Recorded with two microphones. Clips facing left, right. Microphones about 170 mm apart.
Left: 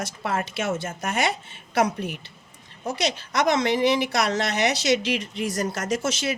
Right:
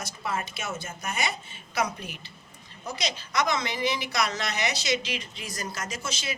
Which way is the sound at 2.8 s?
80° left.